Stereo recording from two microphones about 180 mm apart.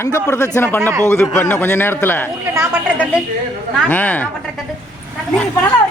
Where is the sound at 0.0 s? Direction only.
15° left (ahead or behind).